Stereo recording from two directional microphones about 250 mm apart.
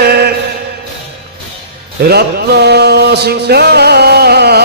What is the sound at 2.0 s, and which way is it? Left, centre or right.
Music, right.